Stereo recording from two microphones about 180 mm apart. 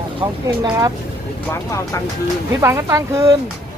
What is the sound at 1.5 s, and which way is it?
Speech, 15° left (ahead or behind).